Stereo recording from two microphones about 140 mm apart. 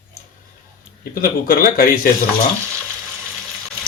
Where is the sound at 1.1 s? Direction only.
90° left.